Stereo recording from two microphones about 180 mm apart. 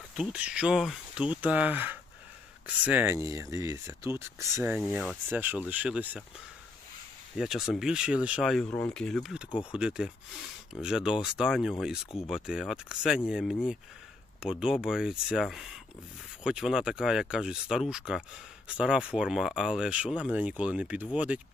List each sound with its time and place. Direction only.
0.1 s speech: 5° right (ahead or behind)
7.3 s speech: centre (ahead or behind)